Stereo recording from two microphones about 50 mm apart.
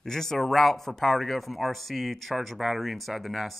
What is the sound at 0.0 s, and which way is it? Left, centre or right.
Speech, centre.